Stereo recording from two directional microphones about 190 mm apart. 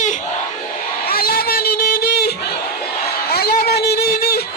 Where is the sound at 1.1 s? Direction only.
50° left (ahead or behind).